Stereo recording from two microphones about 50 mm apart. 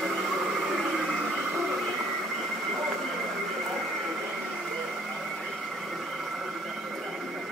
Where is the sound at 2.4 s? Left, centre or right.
Centre.